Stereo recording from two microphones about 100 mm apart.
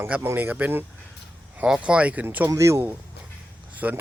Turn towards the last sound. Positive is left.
turn(degrees=-15)  # may be behind; listen again after turning